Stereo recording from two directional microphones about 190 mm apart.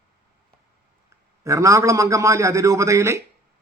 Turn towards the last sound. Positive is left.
turn(degrees=-15)  # may be behind; listen again after turning